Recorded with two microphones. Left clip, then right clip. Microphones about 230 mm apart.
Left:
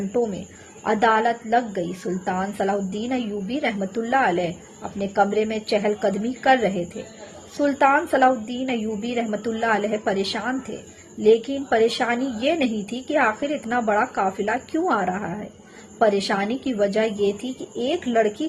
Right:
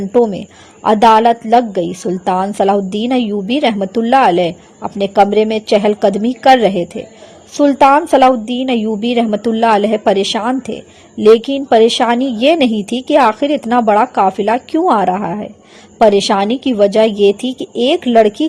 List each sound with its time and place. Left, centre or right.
0.8 s a woman's voice: right